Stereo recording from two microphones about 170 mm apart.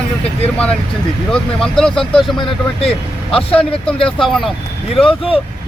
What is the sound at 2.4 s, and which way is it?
Speech, 35° left (ahead or behind).